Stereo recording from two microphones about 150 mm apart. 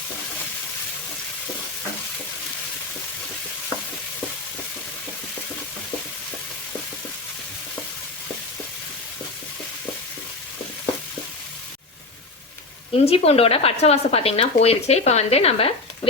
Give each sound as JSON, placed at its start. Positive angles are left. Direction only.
{"t": 12.9, "sound": "speech", "side_deg": 40}